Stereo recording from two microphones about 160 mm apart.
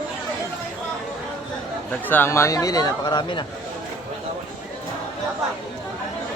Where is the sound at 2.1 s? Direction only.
15° left (ahead or behind).